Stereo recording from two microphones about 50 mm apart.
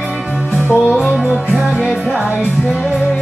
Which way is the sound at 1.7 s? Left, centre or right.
Centre.